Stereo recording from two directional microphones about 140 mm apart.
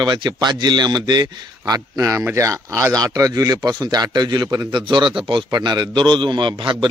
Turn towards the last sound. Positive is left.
turn(degrees=-35)  # may be behind; listen again after turning